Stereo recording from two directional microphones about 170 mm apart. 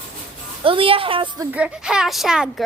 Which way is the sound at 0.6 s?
30° right (ahead or behind).